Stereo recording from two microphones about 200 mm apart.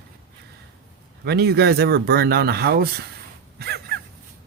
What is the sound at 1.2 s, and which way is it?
Speech, 55° right (ahead or behind).